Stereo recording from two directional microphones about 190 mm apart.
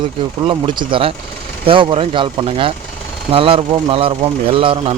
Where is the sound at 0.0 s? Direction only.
25° right (ahead or behind).